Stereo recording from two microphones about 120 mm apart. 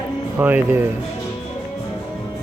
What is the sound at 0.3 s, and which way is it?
Speech, 15° right (ahead or behind).